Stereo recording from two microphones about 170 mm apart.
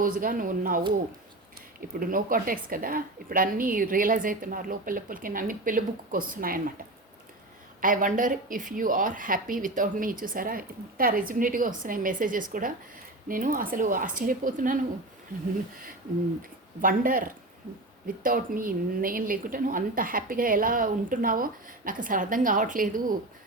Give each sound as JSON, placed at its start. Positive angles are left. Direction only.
{"t": 0.0, "sound": "speech", "side_deg": -55}
{"t": 2.0, "sound": "a woman's voice", "side_deg": -55}
{"t": 7.8, "sound": "speech", "side_deg": -50}
{"t": 15.3, "sound": "speech", "side_deg": -15}
{"t": 16.8, "sound": "a woman's voice", "side_deg": -55}